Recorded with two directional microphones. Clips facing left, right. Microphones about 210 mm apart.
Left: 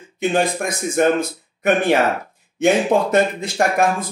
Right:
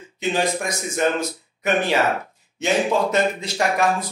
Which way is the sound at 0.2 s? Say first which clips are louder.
Left 3 dB; 55° left (ahead or behind).